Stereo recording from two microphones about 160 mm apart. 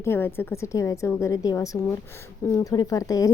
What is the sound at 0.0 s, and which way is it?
A woman's voice, 15° left (ahead or behind).